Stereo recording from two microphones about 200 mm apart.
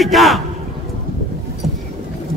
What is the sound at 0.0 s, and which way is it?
Speech, centre (ahead or behind).